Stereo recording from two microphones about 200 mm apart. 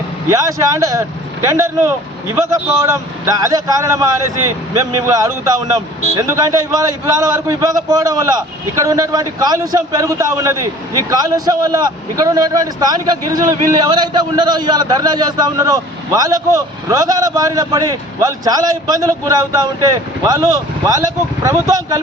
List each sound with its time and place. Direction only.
0.3 s a man's voice: 15° right (ahead or behind)